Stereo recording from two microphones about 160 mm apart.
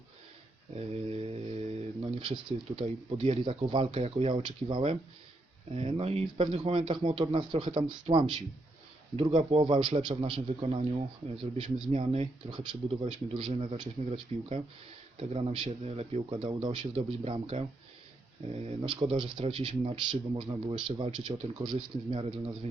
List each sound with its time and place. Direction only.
0.8 s mantra: 35° right (ahead or behind)
2.8 s speech: 35° right (ahead or behind)